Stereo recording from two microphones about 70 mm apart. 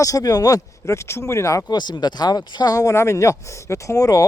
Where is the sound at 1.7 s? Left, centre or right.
Left.